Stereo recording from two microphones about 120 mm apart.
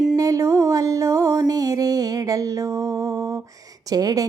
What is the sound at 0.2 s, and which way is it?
Music, 30° right (ahead or behind).